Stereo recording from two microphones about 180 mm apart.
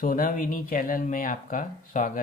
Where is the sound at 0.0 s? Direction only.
50° left (ahead or behind).